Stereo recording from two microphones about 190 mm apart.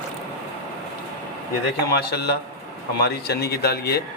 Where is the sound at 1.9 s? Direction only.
55° left (ahead or behind).